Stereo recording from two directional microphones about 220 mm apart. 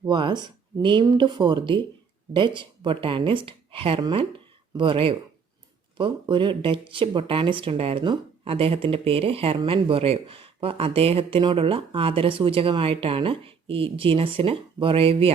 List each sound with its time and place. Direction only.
0.0 s speech: 20° right (ahead or behind)